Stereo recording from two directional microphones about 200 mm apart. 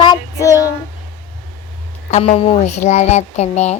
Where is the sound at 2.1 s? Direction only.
35° left (ahead or behind).